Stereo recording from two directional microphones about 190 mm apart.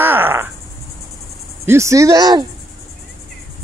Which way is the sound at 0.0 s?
10° right (ahead or behind).